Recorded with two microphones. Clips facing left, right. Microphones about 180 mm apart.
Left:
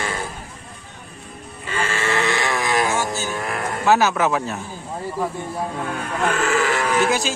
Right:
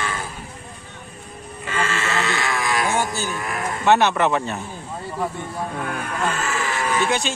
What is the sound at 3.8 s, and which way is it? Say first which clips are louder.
Speech: even; centre (ahead or behind).